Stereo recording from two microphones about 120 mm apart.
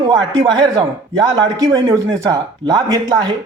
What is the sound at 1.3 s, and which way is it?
A man's voice, 30° right (ahead or behind).